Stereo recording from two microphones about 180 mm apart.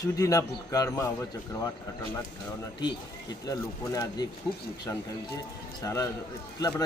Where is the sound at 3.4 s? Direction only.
20° left (ahead or behind).